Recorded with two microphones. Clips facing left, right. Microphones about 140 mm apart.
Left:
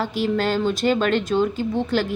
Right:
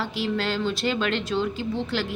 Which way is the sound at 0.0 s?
45° left (ahead or behind).